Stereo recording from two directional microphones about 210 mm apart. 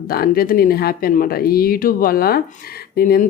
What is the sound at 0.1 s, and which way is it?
Speech, 45° left (ahead or behind).